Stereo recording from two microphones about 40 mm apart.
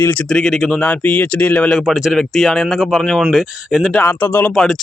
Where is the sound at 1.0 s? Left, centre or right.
Left.